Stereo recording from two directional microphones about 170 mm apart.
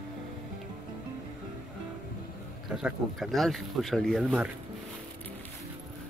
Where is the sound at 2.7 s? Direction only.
Centre (ahead or behind).